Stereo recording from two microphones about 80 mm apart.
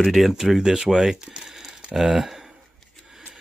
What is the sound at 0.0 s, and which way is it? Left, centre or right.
Speech, centre.